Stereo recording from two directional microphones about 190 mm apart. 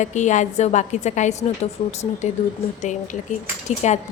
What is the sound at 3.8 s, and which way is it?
Speech, 35° left (ahead or behind).